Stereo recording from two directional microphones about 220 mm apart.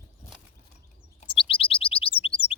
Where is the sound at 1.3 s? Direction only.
25° left (ahead or behind).